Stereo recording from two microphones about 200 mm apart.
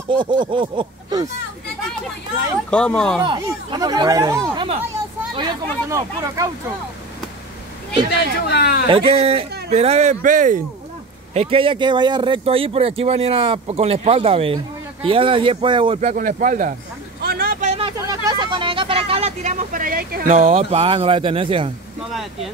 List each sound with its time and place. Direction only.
0.1 s speech: 25° right (ahead or behind)
2.7 s speech: 5° left (ahead or behind)
3.3 s speech: 20° right (ahead or behind)
8.5 s speech: 55° left (ahead or behind)
9.2 s speech: 30° right (ahead or behind)
11.3 s speech: 25° right (ahead or behind)
17.2 s vehicle: 50° right (ahead or behind); by 17.9 s 30° right (ahead or behind)
17.9 s a sound: 20° right (ahead or behind); by 20.2 s 50° right (ahead or behind)
20.2 s speech: 30° right (ahead or behind)